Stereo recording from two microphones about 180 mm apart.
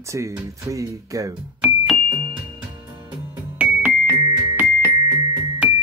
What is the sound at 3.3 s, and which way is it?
Music, 10° right (ahead or behind).